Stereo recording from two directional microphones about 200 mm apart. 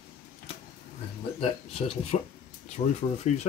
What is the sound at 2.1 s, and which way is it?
Speech, 30° left (ahead or behind).